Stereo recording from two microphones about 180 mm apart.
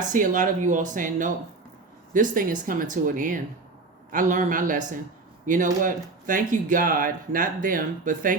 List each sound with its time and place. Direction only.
0.1 s speech: 45° right (ahead or behind)